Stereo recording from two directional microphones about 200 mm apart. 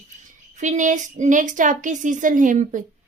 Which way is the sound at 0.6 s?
40° right (ahead or behind).